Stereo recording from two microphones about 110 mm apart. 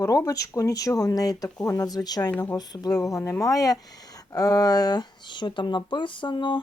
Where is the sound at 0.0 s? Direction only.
30° left (ahead or behind).